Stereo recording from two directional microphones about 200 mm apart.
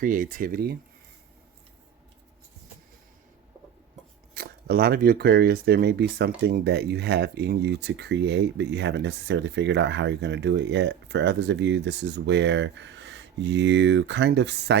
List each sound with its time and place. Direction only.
0.0 s speech: 40° right (ahead or behind)
4.4 s speech: 50° right (ahead or behind)